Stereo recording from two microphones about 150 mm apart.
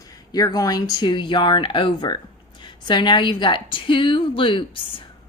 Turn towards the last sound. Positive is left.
turn(degrees=35)  # may be behind; listen again after turning